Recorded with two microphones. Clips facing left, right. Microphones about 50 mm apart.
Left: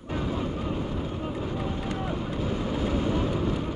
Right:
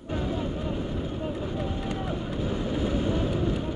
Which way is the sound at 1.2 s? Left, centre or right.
Centre.